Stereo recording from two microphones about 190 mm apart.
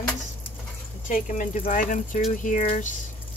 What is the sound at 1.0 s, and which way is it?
Speech, 45° left (ahead or behind).